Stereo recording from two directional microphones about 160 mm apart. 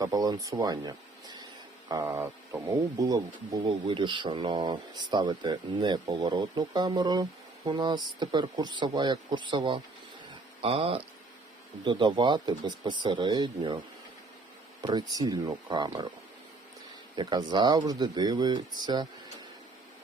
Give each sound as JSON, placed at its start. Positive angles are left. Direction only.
{"t": 0.0, "sound": "speech", "side_deg": -25}
{"t": 14.8, "sound": "speech", "side_deg": -30}
{"t": 17.2, "sound": "speech", "side_deg": -30}